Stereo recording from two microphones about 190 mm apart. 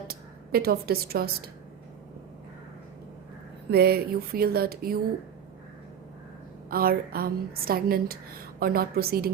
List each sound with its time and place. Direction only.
0.1 s speech: 55° right (ahead or behind)
3.7 s a woman's voice: 55° right (ahead or behind)
6.7 s a woman's voice: 50° right (ahead or behind)